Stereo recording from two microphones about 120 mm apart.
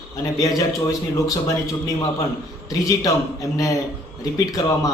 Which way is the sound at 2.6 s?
30° left (ahead or behind).